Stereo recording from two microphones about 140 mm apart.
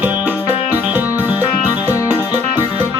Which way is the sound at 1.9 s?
25° left (ahead or behind).